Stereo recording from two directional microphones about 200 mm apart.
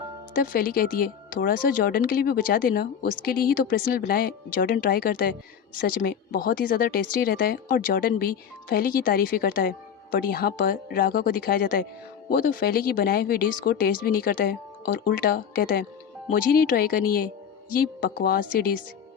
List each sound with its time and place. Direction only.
0.3 s speech: 45° left (ahead or behind)